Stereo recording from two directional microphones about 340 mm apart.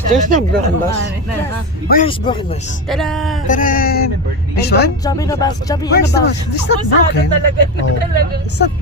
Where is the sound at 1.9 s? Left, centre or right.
Centre.